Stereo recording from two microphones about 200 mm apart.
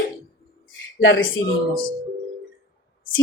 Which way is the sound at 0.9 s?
70° left (ahead or behind).